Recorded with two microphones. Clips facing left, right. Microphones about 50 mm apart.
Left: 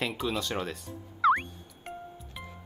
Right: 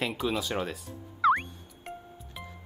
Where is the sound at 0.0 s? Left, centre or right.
Centre.